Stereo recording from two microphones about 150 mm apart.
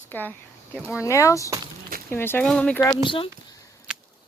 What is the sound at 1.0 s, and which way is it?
Speech, 20° left (ahead or behind).